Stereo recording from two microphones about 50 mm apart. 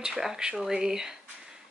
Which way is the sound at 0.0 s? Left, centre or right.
Centre.